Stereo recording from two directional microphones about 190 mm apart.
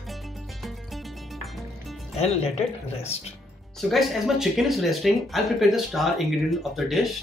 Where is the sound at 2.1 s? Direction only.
35° left (ahead or behind).